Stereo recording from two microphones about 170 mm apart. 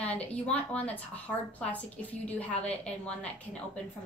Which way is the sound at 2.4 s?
5° left (ahead or behind).